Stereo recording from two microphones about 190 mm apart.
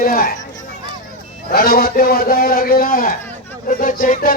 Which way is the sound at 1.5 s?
50° left (ahead or behind).